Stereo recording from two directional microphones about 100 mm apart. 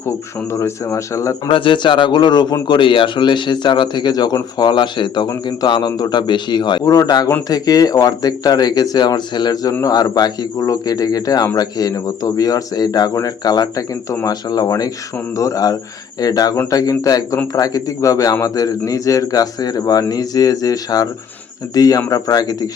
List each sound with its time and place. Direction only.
0.5 s a man's voice: 25° left (ahead or behind)
1.5 s speech: 60° left (ahead or behind); by 2.6 s 45° left (ahead or behind)
2.6 s speech: 55° left (ahead or behind)
6.8 s speech: 35° left (ahead or behind)